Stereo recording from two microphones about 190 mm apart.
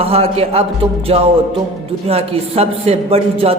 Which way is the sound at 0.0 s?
30° right (ahead or behind).